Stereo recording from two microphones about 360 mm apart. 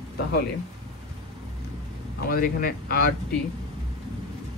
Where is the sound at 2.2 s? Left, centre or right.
Left.